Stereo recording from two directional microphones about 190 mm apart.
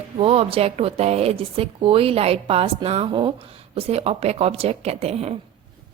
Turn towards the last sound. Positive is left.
turn(degrees=-35)  # may be behind; listen again after turning